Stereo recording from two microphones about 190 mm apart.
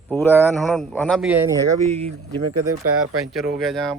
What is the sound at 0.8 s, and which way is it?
Speech, centre (ahead or behind).